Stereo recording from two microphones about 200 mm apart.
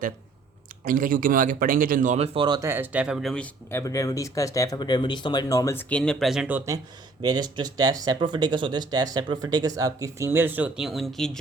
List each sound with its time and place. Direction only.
0.9 s speech: 45° right (ahead or behind); by 6.6 s 5° right (ahead or behind)
7.2 s speech: 20° right (ahead or behind); by 11.3 s centre (ahead or behind)